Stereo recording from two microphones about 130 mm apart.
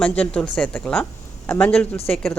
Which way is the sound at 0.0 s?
10° left (ahead or behind).